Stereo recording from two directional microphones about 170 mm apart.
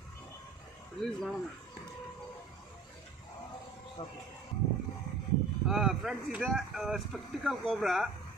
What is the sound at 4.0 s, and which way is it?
Speech, 40° left (ahead or behind).